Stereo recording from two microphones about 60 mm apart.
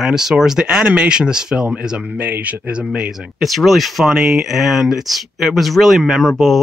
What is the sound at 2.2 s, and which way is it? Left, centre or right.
Speech, right.